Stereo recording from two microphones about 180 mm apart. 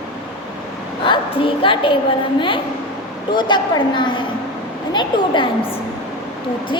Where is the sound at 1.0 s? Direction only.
30° left (ahead or behind).